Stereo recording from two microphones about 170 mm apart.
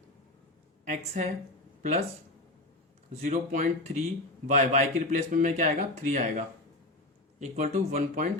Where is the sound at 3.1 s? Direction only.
45° right (ahead or behind).